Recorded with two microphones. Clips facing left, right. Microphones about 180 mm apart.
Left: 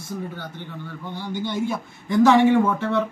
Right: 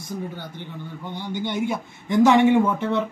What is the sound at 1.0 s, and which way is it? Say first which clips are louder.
A man's voice: even; 20° right (ahead or behind).